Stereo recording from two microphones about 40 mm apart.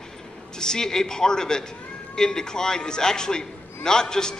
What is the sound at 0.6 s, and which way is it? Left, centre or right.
A man's voice, centre.